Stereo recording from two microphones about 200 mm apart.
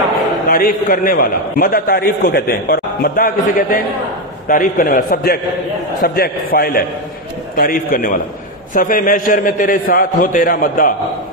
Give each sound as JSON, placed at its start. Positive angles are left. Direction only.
{"t": 0.5, "sound": "a man's voice", "side_deg": 45}